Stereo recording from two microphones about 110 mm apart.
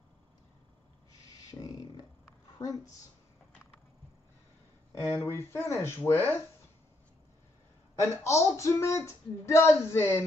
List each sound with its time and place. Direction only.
1.5 s a sound: 35° left (ahead or behind)
2.6 s a woman's voice: 30° left (ahead or behind)
5.0 s speech: 25° left (ahead or behind)
8.0 s speech: 25° left (ahead or behind)